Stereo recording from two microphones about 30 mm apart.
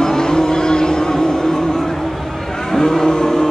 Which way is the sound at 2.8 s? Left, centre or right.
Centre.